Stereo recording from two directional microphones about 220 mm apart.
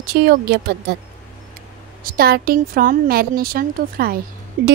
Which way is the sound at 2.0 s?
45° right (ahead or behind).